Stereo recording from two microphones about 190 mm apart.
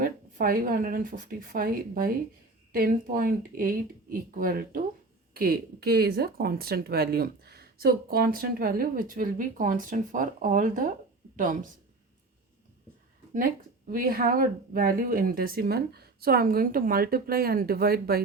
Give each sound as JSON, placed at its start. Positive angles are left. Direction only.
{"t": 0.0, "sound": "speech", "side_deg": -50}
{"t": 13.3, "sound": "speech", "side_deg": -50}